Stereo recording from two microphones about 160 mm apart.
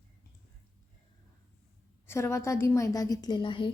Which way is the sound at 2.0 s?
15° left (ahead or behind).